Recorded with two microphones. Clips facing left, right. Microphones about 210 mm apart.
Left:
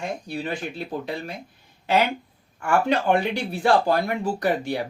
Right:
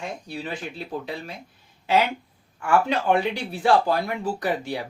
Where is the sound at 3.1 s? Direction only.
5° right (ahead or behind).